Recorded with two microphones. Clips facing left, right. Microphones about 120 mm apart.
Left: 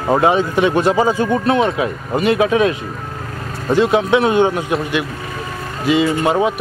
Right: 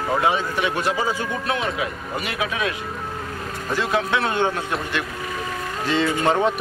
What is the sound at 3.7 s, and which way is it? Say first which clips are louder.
Speech: left 9 dB; 20° left (ahead or behind).